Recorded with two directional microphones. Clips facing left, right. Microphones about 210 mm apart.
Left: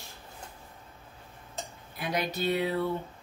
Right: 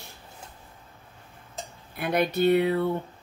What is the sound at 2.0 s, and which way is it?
Speech, 60° right (ahead or behind).